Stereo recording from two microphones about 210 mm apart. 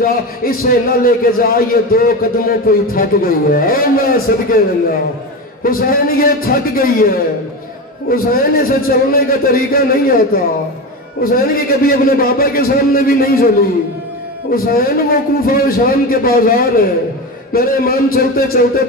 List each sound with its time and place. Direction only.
0.0 s a man's voice: 45° left (ahead or behind)